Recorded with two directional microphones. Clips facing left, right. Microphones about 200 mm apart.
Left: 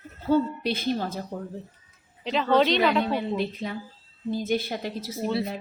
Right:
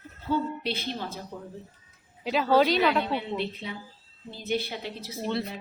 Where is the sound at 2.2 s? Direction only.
5° right (ahead or behind).